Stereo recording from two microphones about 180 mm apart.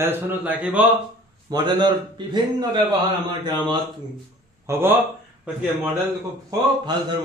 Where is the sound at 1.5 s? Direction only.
25° right (ahead or behind).